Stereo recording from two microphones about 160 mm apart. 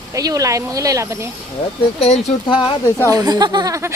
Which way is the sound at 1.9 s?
45° left (ahead or behind).